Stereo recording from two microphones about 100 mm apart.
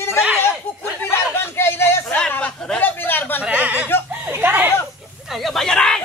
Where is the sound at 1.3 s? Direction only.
25° left (ahead or behind).